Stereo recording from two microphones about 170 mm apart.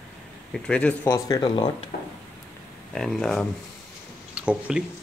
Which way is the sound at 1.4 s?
30° left (ahead or behind).